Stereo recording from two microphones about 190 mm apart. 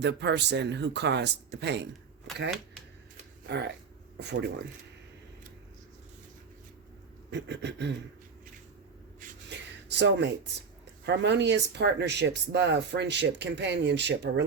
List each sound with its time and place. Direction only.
0.0 s speech: 65° right (ahead or behind)
2.3 s speech: centre (ahead or behind)
4.2 s speech: 65° right (ahead or behind)
7.3 s speech: 65° right (ahead or behind)
9.5 s a sound: 65° right (ahead or behind)
11.0 s speech: 65° right (ahead or behind)